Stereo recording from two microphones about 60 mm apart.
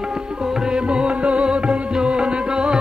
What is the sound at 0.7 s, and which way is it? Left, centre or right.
Music, centre.